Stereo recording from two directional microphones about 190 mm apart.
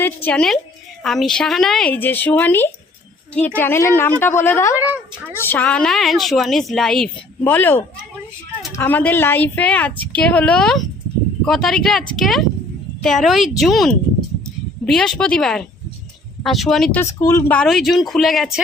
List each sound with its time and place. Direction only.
0.0 s a woman's voice: 10° left (ahead or behind)
4.9 s speech: 10° right (ahead or behind)
5.4 s a woman's voice: 10° left (ahead or behind)
17.0 s a woman's voice: 15° left (ahead or behind)
17.6 s speech: centre (ahead or behind)